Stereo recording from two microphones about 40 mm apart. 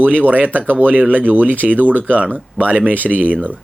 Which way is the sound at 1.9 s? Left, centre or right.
Left.